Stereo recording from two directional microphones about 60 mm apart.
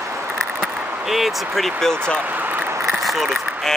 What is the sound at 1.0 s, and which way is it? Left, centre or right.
Speech, centre.